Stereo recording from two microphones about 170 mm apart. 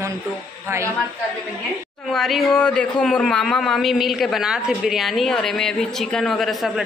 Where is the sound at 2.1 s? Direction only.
Centre (ahead or behind).